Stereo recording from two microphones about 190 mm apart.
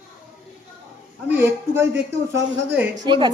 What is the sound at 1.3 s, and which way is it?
Speech, 10° right (ahead or behind).